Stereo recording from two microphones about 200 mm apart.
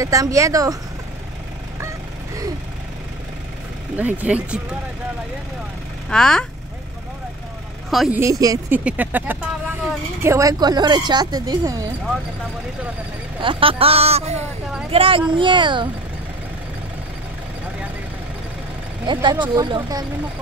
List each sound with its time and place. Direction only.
0.0 s speech: 15° right (ahead or behind)
3.9 s speech: 10° right (ahead or behind)
6.0 s speech: 5° left (ahead or behind)
7.9 s a woman's voice: centre (ahead or behind)
8.2 s speech: 15° right (ahead or behind)
13.4 s speech: 25° right (ahead or behind)
19.1 s speech: 20° right (ahead or behind)